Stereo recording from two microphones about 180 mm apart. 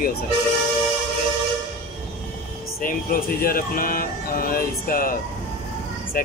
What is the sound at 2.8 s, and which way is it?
Speech, 50° left (ahead or behind).